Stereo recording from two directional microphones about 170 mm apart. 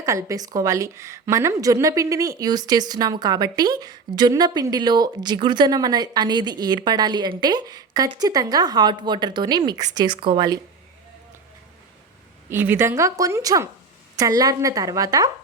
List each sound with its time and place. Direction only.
0.0 s a woman's voice: 15° right (ahead or behind)
12.5 s a woman's voice: 10° right (ahead or behind)